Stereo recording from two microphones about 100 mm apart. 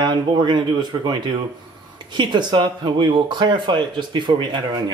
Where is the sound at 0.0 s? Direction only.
45° right (ahead or behind).